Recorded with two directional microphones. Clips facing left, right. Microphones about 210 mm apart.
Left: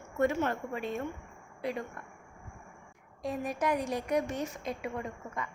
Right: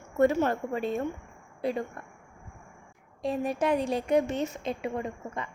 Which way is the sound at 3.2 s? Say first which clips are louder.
Right 4 dB; 30° right (ahead or behind).